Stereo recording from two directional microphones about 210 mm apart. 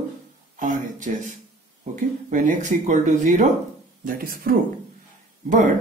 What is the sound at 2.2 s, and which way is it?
Speech, 35° right (ahead or behind).